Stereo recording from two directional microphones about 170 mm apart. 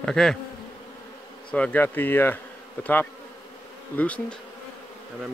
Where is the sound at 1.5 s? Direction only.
10° left (ahead or behind).